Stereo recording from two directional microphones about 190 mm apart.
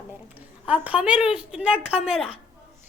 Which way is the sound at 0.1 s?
10° right (ahead or behind).